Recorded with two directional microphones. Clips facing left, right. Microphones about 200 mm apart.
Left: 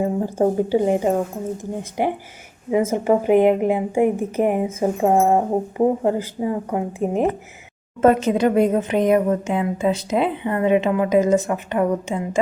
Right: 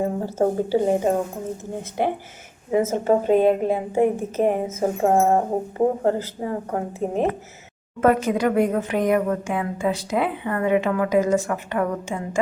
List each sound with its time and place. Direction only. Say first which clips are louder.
0.0 s a woman's voice: left 2 dB; 15° left (ahead or behind)
2.6 s a woman's voice: left 1 dB; 10° left (ahead or behind)